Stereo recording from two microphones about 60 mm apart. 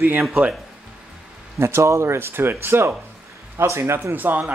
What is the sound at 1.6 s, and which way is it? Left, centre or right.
Speech, right.